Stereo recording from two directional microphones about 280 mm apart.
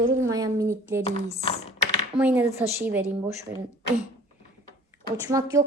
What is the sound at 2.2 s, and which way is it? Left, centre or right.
A woman's voice, centre.